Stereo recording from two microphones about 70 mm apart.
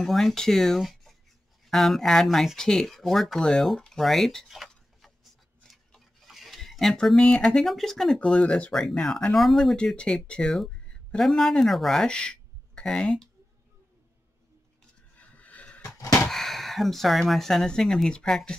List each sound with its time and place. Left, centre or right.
0.0 s speech: centre
5.6 s a sound: centre
7.6 s speech: centre
9.8 s speech: centre
10.5 s a sound: centre
11.1 s speech: centre
15.1 s neigh: left
16.0 s a sound: left
16.3 s speech: centre